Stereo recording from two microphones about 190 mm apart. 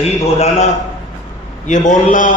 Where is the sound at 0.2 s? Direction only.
35° left (ahead or behind).